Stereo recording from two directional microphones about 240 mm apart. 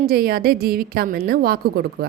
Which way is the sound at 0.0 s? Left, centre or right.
Right.